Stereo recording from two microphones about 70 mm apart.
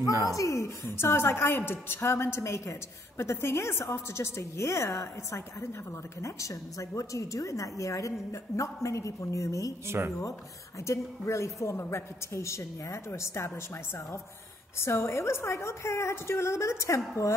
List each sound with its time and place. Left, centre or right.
0.1 s speech: right
0.4 s a woman's voice: left
9.8 s speech: right
10.9 s a woman's voice: left
14.8 s a woman's voice: left